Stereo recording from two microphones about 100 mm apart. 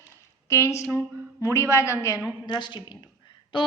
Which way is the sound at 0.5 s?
30° left (ahead or behind).